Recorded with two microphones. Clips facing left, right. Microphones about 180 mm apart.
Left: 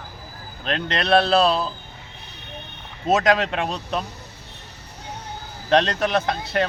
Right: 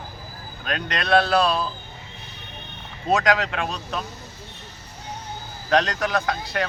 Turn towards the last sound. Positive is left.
turn(degrees=25)  # may be behind; listen again after turning